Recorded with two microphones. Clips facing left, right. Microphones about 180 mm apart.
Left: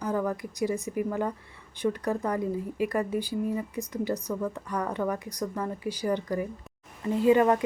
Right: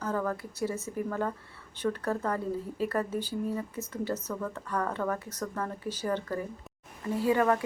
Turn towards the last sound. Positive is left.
turn(degrees=20)  # may be behind; listen again after turning